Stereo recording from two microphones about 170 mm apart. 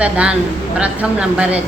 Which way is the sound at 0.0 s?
5° right (ahead or behind).